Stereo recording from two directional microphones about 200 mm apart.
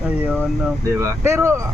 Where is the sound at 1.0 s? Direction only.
15° right (ahead or behind).